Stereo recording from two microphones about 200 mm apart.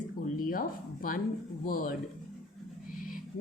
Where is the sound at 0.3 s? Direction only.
45° left (ahead or behind).